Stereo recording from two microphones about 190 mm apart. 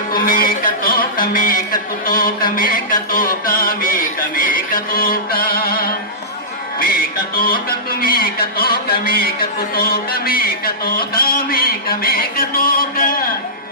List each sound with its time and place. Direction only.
0.1 s speech: 50° left (ahead or behind)
7.3 s speech: 50° left (ahead or behind)